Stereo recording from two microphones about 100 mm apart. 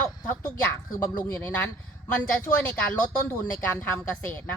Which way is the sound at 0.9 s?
25° left (ahead or behind).